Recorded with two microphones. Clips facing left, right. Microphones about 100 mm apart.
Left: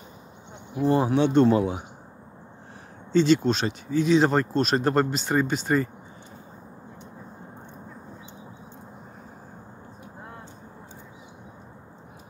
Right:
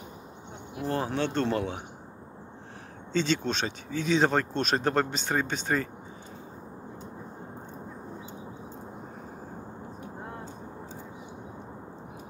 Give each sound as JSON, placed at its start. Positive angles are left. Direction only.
{"t": 0.7, "sound": "speech", "side_deg": 10}
{"t": 3.1, "sound": "speech", "side_deg": 5}